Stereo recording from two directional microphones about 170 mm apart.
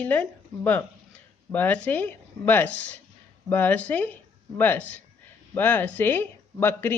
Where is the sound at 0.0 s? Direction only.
10° left (ahead or behind).